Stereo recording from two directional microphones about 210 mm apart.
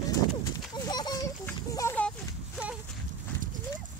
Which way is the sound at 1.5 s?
10° left (ahead or behind).